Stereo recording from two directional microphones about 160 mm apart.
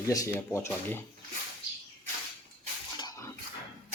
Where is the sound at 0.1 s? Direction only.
20° left (ahead or behind).